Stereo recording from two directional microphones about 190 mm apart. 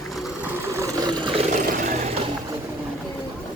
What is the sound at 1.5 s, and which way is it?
Vehicle, 45° right (ahead or behind).